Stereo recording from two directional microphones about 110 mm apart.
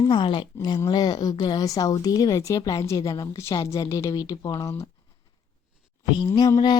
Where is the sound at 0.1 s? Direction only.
45° left (ahead or behind).